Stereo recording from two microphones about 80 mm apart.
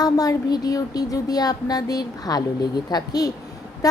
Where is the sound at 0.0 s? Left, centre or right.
Left.